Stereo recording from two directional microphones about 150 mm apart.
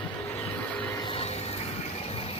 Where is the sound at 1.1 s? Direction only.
40° left (ahead or behind).